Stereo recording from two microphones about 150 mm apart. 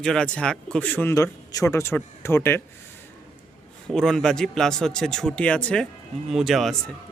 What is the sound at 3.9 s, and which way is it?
Speech, 5° left (ahead or behind).